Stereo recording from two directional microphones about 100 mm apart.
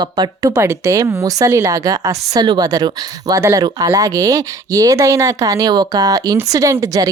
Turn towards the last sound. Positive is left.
turn(degrees=-35)  # may be behind; listen again after turning